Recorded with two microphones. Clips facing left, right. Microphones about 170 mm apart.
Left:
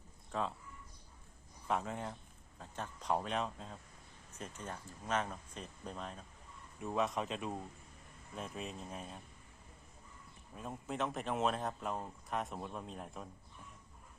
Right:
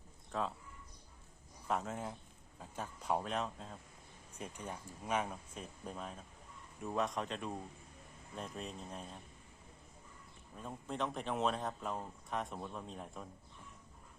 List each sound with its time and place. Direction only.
0.3 s speech: centre (ahead or behind)
1.6 s speech: centre (ahead or behind)
4.4 s speech: 15° right (ahead or behind); by 9.2 s 5° left (ahead or behind)
10.6 s speech: 5° left (ahead or behind)